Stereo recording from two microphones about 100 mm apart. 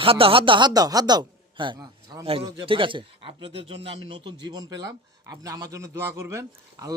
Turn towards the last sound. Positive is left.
turn(degrees=-30)  # may be behind; listen again after turning